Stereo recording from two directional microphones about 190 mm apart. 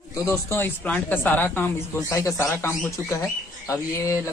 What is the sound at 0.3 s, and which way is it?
Speech, 10° left (ahead or behind).